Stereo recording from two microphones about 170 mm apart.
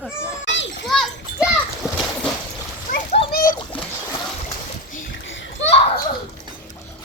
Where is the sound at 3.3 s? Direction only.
55° left (ahead or behind).